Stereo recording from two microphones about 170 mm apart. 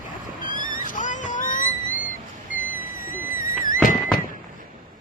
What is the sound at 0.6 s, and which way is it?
Vehicle, 50° left (ahead or behind).